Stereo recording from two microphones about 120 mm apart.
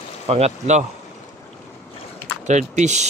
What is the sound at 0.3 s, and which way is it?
Speech, 65° right (ahead or behind).